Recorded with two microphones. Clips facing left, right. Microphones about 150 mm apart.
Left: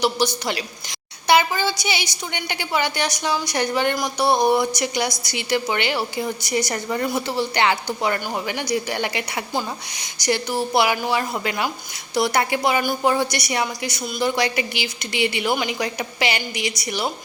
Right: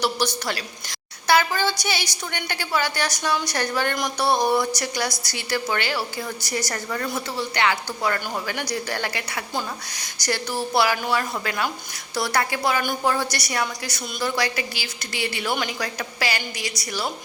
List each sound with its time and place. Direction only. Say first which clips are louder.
0.4 s a woman's voice: left 3 dB; 20° left (ahead or behind)
7.3 s a woman's voice: left 1 dB; 30° left (ahead or behind)